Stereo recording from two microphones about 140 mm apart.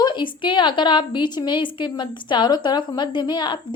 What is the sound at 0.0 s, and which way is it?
A woman's voice, 35° left (ahead or behind).